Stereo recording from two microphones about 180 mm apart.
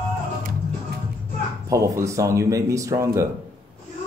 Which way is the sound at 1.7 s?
15° right (ahead or behind).